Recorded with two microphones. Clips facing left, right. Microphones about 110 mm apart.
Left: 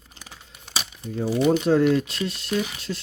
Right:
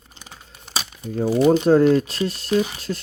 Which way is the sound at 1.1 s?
45° right (ahead or behind).